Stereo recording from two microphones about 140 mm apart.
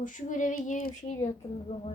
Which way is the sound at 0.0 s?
65° left (ahead or behind).